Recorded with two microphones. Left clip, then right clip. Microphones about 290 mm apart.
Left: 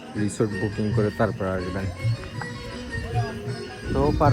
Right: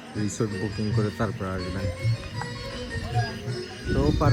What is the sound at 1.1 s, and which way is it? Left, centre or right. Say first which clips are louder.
Speech: left 6 dB; left.